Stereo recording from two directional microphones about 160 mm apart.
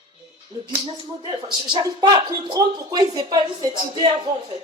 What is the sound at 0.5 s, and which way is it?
Speech, 20° right (ahead or behind).